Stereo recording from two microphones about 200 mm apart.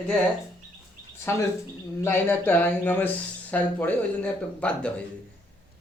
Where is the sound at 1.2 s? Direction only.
15° left (ahead or behind).